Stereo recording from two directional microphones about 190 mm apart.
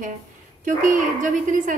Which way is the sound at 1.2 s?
45° right (ahead or behind).